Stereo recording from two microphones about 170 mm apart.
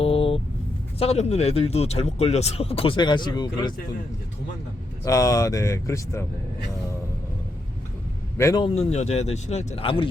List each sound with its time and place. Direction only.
0.0 s vehicle: 35° left (ahead or behind)
0.9 s speech: 35° left (ahead or behind)
5.0 s speech: 20° left (ahead or behind)
8.4 s a man's voice: 15° left (ahead or behind)
8.6 s speech: 40° left (ahead or behind)